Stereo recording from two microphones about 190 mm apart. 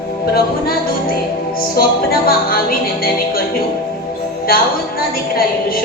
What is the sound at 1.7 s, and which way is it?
Speech, 50° left (ahead or behind).